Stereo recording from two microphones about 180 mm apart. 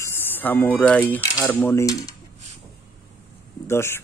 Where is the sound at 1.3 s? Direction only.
15° left (ahead or behind).